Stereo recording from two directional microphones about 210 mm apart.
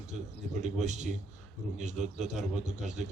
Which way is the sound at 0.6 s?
35° right (ahead or behind).